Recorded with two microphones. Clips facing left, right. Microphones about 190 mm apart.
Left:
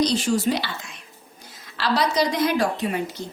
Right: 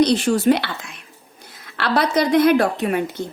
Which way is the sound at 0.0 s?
60° right (ahead or behind).